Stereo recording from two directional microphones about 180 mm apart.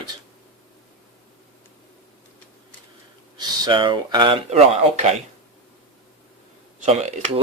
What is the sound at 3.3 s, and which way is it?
Speech, 25° right (ahead or behind).